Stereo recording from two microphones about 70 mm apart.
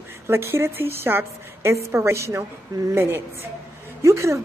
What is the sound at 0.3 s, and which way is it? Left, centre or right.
A woman's voice, right.